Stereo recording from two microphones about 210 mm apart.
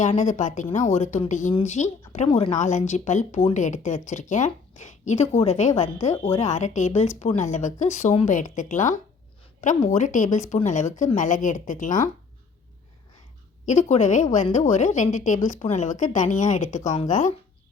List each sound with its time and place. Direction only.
0.0 s speech: 35° left (ahead or behind)
13.7 s speech: 35° left (ahead or behind)